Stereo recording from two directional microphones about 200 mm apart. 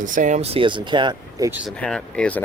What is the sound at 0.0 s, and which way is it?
Speech, 40° right (ahead or behind).